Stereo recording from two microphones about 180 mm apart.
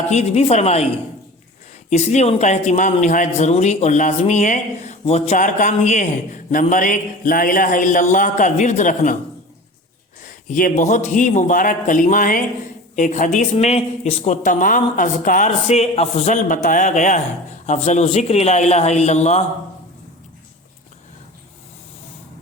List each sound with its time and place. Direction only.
0.1 s speech: 40° left (ahead or behind)
1.9 s speech: 40° left (ahead or behind)
10.2 s speech: 45° left (ahead or behind)